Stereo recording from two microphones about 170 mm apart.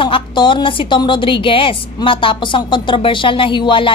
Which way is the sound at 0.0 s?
30° left (ahead or behind).